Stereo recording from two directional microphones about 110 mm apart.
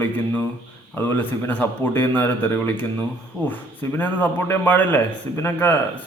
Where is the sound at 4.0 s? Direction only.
15° left (ahead or behind).